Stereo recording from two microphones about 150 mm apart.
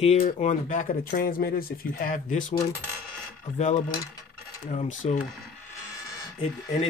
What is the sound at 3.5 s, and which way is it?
Speech, 50° left (ahead or behind).